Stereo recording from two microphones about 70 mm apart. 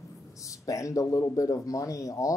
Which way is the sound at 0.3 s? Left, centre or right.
Left.